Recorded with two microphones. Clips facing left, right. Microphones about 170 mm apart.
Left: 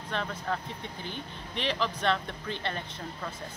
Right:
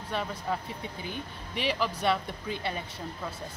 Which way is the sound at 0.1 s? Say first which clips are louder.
Right 1 dB; 10° right (ahead or behind).